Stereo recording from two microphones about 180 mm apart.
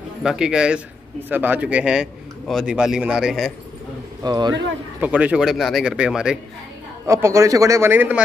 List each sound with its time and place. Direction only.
0.2 s a man's voice: 5° right (ahead or behind)
4.2 s a man's voice: 25° right (ahead or behind)
5.0 s a man's voice: 5° right (ahead or behind)
7.1 s speech: 15° right (ahead or behind)